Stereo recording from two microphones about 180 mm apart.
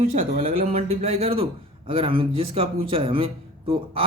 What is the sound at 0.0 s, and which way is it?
Speech, 35° right (ahead or behind).